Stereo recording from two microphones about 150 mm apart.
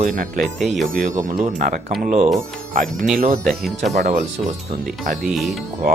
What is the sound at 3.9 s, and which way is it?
Speech, 55° right (ahead or behind).